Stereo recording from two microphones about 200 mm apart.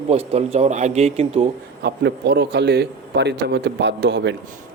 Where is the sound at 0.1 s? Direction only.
30° right (ahead or behind).